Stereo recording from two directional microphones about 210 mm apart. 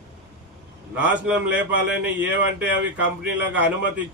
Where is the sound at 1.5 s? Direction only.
55° right (ahead or behind).